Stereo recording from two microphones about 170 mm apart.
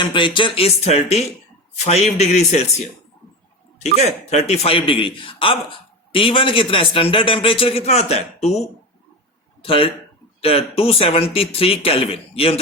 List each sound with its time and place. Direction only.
0.0 s a man's voice: 30° left (ahead or behind)